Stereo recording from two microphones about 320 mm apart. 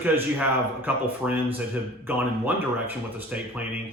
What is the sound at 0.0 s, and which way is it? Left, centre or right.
Speech, centre.